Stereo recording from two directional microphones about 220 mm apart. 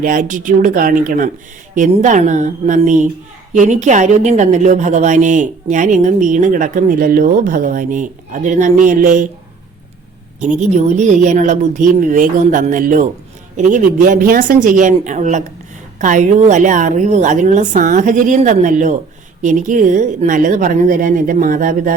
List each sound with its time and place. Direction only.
0.0 s a woman's voice: 35° right (ahead or behind)
10.4 s a woman's voice: 35° right (ahead or behind)